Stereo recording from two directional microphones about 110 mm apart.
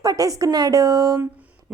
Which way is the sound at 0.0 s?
35° right (ahead or behind).